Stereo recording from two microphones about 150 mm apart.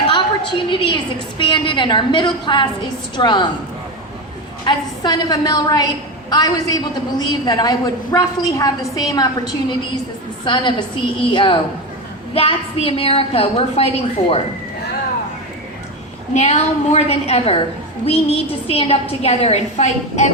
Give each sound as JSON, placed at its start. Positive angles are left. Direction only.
{"t": 0.1, "sound": "a sound", "side_deg": 35}
{"t": 1.4, "sound": "a woman's voice", "side_deg": 35}
{"t": 4.6, "sound": "a woman's voice", "side_deg": 30}
{"t": 10.4, "sound": "a woman's voice", "side_deg": 30}
{"t": 16.3, "sound": "a woman's voice", "side_deg": 45}